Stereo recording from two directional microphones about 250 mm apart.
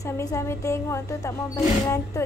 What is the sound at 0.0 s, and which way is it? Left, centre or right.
Speech, centre.